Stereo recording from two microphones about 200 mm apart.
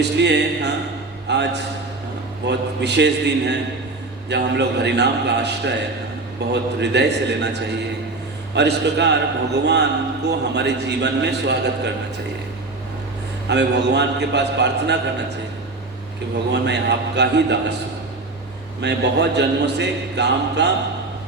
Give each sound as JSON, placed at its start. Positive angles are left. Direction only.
{"t": 0.0, "sound": "a man's voice", "side_deg": -60}
{"t": 13.5, "sound": "a man's voice", "side_deg": -60}
{"t": 16.5, "sound": "a man's voice", "side_deg": -60}
{"t": 18.8, "sound": "a man's voice", "side_deg": -60}